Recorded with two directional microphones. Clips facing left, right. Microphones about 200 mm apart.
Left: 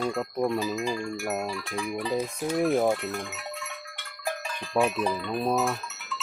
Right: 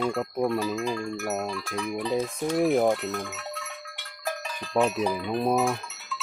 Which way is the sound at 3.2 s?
15° left (ahead or behind).